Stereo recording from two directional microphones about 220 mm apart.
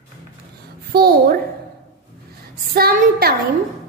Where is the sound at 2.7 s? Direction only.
45° right (ahead or behind).